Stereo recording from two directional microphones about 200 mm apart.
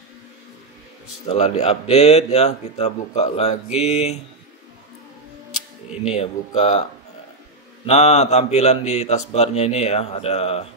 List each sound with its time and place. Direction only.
1.4 s speech: 30° left (ahead or behind)
6.1 s speech: 35° left (ahead or behind)
7.8 s speech: 35° left (ahead or behind)